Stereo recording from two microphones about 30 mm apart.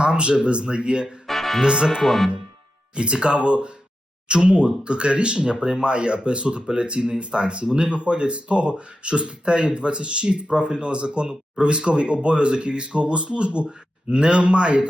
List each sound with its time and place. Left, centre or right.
0.0 s speech: right
1.3 s music: centre
1.6 s speech: right
2.0 s speech: centre
2.9 s speech: right